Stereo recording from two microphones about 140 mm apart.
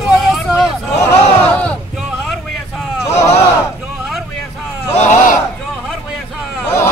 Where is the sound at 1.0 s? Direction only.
10° left (ahead or behind).